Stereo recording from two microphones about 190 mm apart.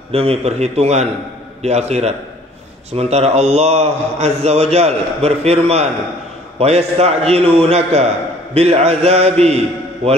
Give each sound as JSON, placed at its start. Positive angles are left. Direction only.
{"t": 0.1, "sound": "a man's voice", "side_deg": -30}